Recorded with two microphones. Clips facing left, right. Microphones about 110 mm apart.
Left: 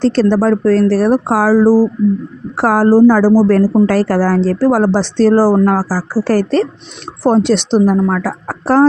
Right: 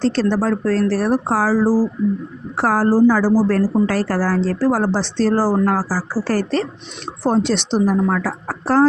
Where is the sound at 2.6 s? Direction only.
50° left (ahead or behind).